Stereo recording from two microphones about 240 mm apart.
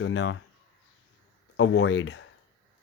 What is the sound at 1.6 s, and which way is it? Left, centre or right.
Speech, left.